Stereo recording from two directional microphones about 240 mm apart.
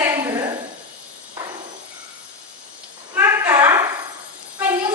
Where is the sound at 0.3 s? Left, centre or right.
Centre.